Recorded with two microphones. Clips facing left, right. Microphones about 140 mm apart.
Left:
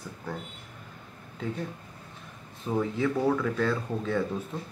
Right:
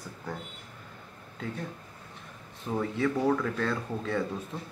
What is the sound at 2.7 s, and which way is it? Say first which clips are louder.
Speech: left 1 dB; 5° left (ahead or behind).